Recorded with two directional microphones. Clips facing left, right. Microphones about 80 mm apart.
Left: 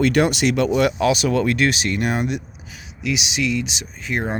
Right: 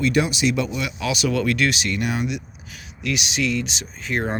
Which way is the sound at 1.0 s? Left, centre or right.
Left.